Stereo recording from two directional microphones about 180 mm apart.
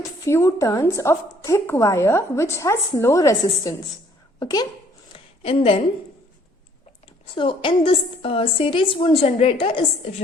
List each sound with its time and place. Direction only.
0.3 s a woman's voice: 15° left (ahead or behind)
5.1 s a sound: 30° left (ahead or behind)
7.3 s a woman's voice: 30° left (ahead or behind)